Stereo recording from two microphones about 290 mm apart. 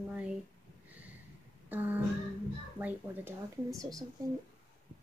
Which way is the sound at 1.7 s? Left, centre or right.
Centre.